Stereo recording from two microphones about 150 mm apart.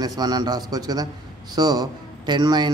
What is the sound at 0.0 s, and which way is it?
Speech, 25° right (ahead or behind).